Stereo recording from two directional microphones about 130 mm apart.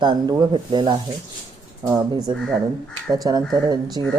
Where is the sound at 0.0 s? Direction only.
35° right (ahead or behind).